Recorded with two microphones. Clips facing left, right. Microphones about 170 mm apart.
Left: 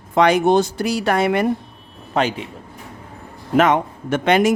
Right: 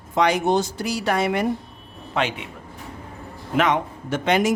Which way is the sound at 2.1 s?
35° left (ahead or behind).